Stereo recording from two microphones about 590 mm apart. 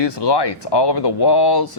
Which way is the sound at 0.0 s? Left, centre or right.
Left.